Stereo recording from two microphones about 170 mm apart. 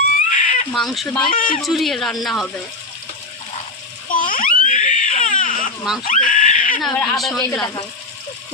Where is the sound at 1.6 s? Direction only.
Centre (ahead or behind).